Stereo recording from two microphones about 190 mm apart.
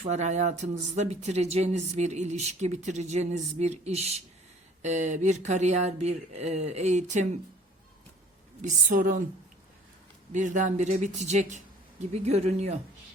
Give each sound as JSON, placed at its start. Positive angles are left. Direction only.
{"t": 0.0, "sound": "speech", "side_deg": -35}
{"t": 8.6, "sound": "a woman's voice", "side_deg": -45}
{"t": 10.3, "sound": "speech", "side_deg": -40}